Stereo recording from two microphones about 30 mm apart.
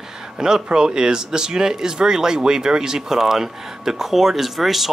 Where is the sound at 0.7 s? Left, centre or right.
Right.